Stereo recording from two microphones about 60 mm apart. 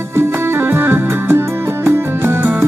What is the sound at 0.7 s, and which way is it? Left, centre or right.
Music, right.